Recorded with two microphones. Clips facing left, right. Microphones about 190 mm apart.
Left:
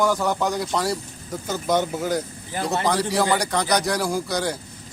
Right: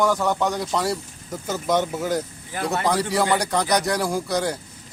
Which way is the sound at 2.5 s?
30° left (ahead or behind).